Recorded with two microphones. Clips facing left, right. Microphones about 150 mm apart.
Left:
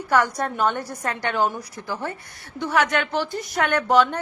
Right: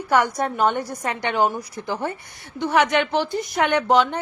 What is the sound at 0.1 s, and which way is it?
A woman's voice, 10° right (ahead or behind).